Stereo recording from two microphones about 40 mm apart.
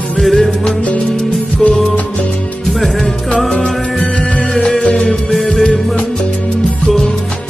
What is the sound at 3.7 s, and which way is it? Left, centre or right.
Music, centre.